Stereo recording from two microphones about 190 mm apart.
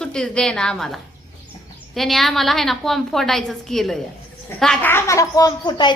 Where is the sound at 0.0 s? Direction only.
5° left (ahead or behind).